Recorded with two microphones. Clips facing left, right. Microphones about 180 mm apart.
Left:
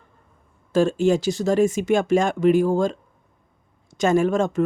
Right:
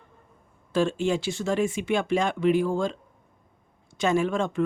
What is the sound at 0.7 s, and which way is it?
Speech, 40° left (ahead or behind).